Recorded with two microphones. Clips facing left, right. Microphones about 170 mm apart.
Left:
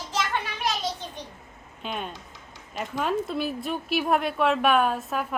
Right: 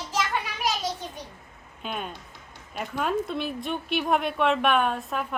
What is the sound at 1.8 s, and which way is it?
A woman's voice, centre (ahead or behind).